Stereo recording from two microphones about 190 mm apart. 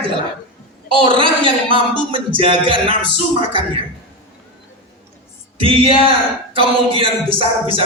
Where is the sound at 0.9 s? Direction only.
25° right (ahead or behind).